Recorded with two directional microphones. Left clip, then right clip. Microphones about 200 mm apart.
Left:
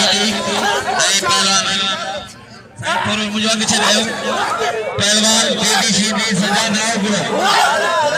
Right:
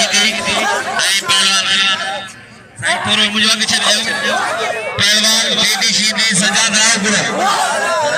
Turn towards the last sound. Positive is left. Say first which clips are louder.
# right 2 dB
turn(degrees=20)  # may be behind; listen again after turning